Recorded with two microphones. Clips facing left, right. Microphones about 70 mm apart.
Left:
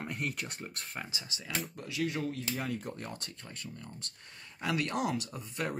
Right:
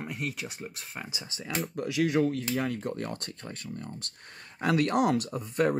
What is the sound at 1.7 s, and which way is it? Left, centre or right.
Speech, right.